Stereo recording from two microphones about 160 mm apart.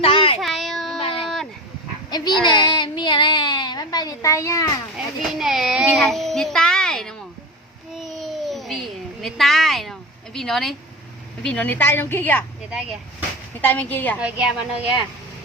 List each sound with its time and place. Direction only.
0.0 s child singing: 35° left (ahead or behind)
0.3 s child singing: centre (ahead or behind)
2.0 s speech: 25° left (ahead or behind)
4.9 s speech: centre (ahead or behind)
7.9 s babbling: centre (ahead or behind)
11.4 s a woman's voice: 10° left (ahead or behind)
12.7 s speech: 5° right (ahead or behind)
13.6 s a woman's voice: 10° left (ahead or behind)
14.2 s a woman's voice: 5° right (ahead or behind)